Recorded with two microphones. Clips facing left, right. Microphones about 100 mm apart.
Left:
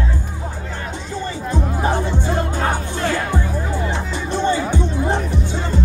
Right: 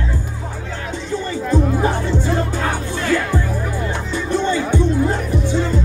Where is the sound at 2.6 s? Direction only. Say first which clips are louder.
Left 1 dB; 30° left (ahead or behind).